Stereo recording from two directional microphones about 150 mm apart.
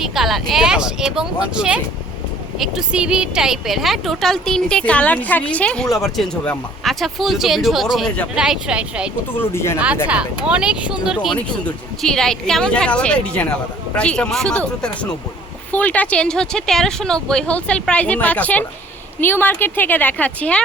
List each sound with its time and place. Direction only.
0.0 s a woman's voice: centre (ahead or behind)
8.4 s a woman's voice: 5° right (ahead or behind)
9.3 s speech: 15° left (ahead or behind)
9.7 s speech: 10° right (ahead or behind)
11.3 s a woman's voice: 5° left (ahead or behind)